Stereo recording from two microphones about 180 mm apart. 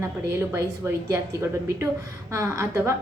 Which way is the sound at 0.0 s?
15° right (ahead or behind).